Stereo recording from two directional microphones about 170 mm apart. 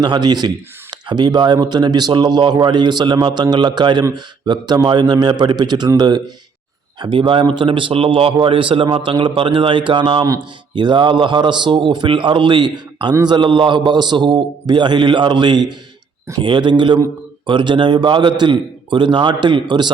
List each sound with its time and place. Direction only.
0.0 s a man's voice: 25° right (ahead or behind)